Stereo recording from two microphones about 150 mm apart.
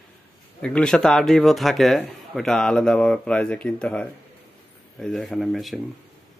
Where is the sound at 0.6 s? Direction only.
5° left (ahead or behind).